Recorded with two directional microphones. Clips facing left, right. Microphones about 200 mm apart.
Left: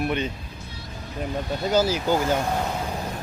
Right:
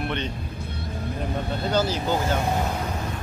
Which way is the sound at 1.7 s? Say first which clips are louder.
Left 3 dB; 10° left (ahead or behind).